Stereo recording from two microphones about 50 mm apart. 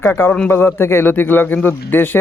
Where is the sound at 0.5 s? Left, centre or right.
Left.